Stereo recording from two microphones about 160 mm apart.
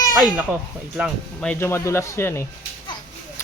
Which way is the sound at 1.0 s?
Centre (ahead or behind).